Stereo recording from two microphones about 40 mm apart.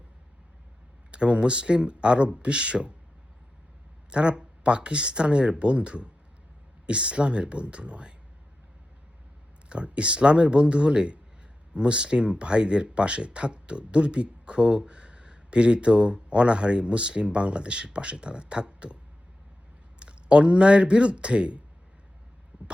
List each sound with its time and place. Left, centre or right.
1.1 s speech: right
4.1 s speech: right
9.6 s speech: right
20.0 s speech: right